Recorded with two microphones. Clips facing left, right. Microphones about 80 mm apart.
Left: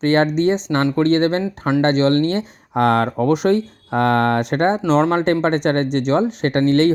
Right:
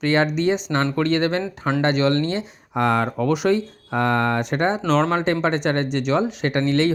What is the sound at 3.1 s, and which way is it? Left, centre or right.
Speech, left.